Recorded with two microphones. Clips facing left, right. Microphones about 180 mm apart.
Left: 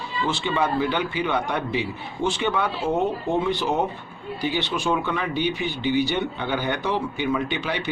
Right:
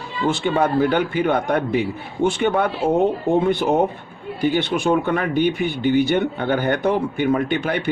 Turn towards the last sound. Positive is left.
turn(degrees=-50)  # may be behind; listen again after turning